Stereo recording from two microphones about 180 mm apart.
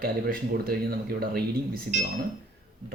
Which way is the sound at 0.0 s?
55° right (ahead or behind).